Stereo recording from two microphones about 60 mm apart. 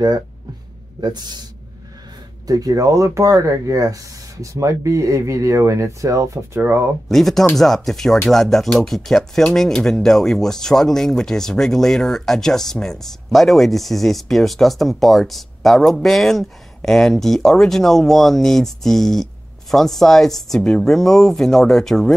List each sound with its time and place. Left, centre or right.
2.4 s speech: right
7.1 s speech: centre